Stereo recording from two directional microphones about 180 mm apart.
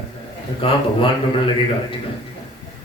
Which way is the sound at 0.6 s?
30° left (ahead or behind).